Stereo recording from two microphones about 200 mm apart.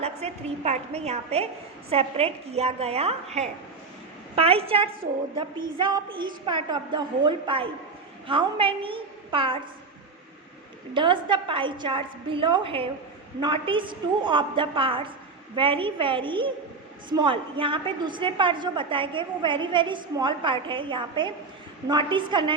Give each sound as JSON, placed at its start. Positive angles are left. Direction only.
{"t": 0.0, "sound": "a woman's voice", "side_deg": -30}
{"t": 10.9, "sound": "a woman's voice", "side_deg": -25}